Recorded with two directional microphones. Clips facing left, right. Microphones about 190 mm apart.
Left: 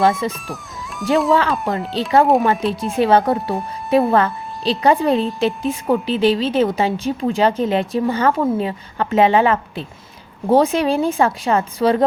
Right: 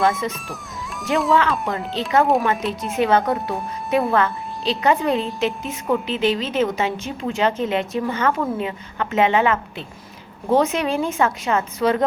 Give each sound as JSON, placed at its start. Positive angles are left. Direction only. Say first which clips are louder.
{"t": 0.0, "sound": "a woman's voice", "louder": "left 3 dB", "side_deg": 30}
{"t": 0.3, "sound": "speech", "louder": "left 3 dB", "side_deg": 0}
{"t": 2.9, "sound": "a woman's voice", "louder": "left 3 dB", "side_deg": 30}